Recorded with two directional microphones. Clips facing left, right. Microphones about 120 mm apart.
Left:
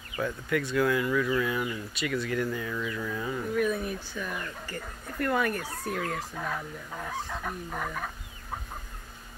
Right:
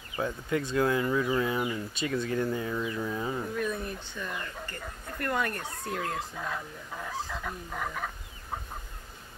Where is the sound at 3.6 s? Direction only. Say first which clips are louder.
Left 4 dB; 5° left (ahead or behind).